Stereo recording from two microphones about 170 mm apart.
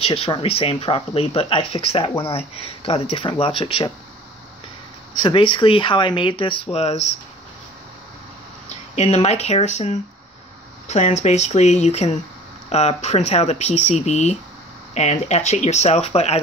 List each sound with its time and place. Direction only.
0.0 s speech: 35° left (ahead or behind)
5.2 s speech: 30° left (ahead or behind)
8.6 s speech: 40° left (ahead or behind)